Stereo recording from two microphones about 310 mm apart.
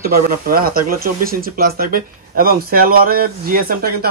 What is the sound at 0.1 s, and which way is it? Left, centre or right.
Speech, right.